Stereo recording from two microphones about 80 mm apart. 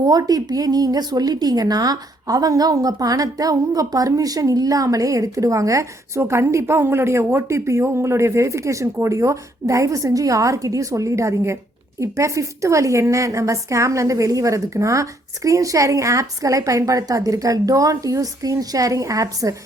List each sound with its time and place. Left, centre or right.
0.0 s a woman's voice: right